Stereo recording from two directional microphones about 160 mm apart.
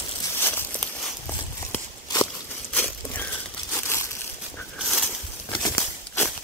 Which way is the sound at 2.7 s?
10° left (ahead or behind).